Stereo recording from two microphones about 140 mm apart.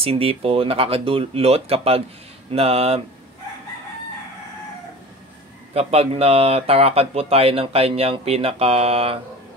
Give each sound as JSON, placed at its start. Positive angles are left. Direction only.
{"t": 0.0, "sound": "speech", "side_deg": -45}
{"t": 5.7, "sound": "speech", "side_deg": -45}